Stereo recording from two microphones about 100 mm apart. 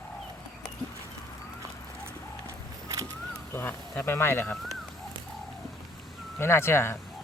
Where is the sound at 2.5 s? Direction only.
35° right (ahead or behind).